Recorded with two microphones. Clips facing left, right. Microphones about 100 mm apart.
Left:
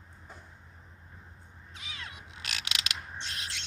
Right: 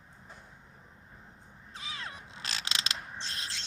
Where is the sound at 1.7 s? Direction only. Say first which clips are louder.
Right 3 dB; 35° right (ahead or behind).